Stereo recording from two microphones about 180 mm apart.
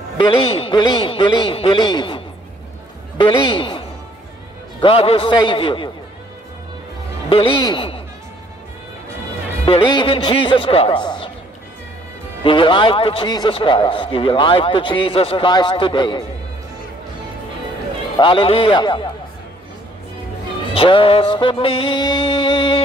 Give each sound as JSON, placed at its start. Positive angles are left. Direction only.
{"t": 0.2, "sound": "speech", "side_deg": 30}
{"t": 7.2, "sound": "a man's voice", "side_deg": 30}
{"t": 9.7, "sound": "speech", "side_deg": 25}
{"t": 12.4, "sound": "speech", "side_deg": 25}
{"t": 18.1, "sound": "speech", "side_deg": 30}
{"t": 20.7, "sound": "speech", "side_deg": 30}